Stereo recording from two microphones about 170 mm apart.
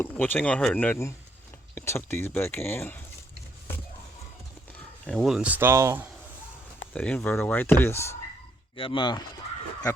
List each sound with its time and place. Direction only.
0.0 s a sound: 10° left (ahead or behind)
0.3 s speech: 5° left (ahead or behind)
5.0 s speech: centre (ahead or behind); by 6.1 s 15° right (ahead or behind)
6.9 s speech: 5° left (ahead or behind)
8.7 s speech: 30° left (ahead or behind)